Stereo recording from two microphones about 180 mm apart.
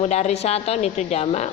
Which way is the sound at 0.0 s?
35° left (ahead or behind).